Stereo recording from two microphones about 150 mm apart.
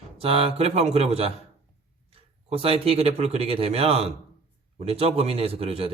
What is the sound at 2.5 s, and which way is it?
A man's voice, 40° right (ahead or behind).